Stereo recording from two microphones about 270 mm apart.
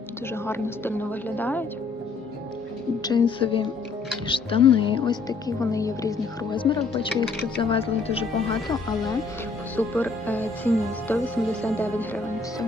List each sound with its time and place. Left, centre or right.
0.4 s speech: centre
3.0 s a woman's voice: centre
9.7 s speech: centre